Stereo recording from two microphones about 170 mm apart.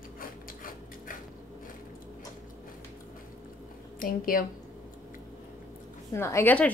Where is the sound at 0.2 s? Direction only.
55° left (ahead or behind).